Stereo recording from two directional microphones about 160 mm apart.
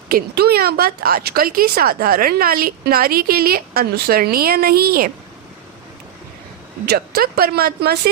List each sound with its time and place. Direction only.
0.1 s speech: 80° right
6.8 s speech: 75° right (ahead or behind)